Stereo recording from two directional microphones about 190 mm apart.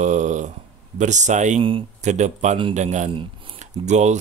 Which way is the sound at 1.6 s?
30° right (ahead or behind).